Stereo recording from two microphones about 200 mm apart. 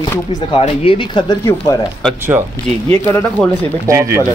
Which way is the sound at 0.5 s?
30° left (ahead or behind).